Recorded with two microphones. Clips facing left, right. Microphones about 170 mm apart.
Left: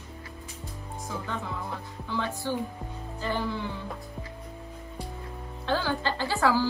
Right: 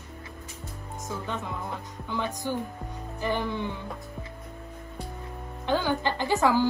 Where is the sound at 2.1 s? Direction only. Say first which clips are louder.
Even; 15° right (ahead or behind).